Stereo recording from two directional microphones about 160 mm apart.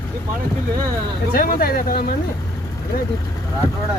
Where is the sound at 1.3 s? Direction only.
65° left (ahead or behind).